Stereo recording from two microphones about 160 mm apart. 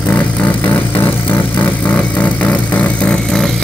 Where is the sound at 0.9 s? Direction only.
30° left (ahead or behind).